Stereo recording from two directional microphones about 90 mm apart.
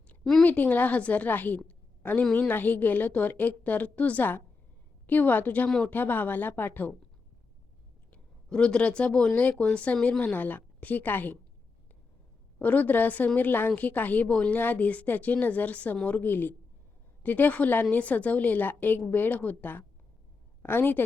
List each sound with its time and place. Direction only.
0.4 s a woman's voice: 20° left (ahead or behind)
8.1 s speech: 10° left (ahead or behind)
12.5 s a woman's voice: 15° left (ahead or behind)